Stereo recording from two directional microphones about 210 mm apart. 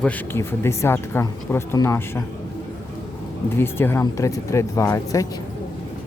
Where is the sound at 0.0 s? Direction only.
10° left (ahead or behind).